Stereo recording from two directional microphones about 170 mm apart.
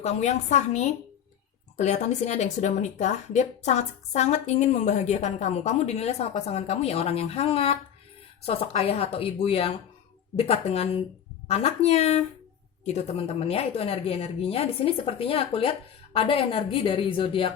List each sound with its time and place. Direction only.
0.0 s a woman's voice: 40° left (ahead or behind)